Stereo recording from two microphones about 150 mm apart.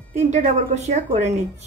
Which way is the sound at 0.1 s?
50° right (ahead or behind).